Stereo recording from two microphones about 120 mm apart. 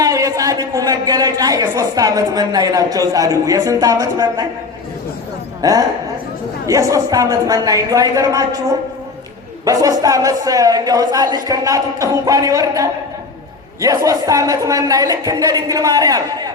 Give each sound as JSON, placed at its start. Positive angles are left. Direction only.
{"t": 0.0, "sound": "a woman's voice", "side_deg": -30}
{"t": 5.6, "sound": "a woman's voice", "side_deg": -30}
{"t": 9.6, "sound": "speech", "side_deg": -30}